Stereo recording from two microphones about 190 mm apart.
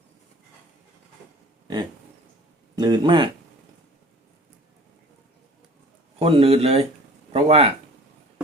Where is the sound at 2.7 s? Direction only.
20° right (ahead or behind).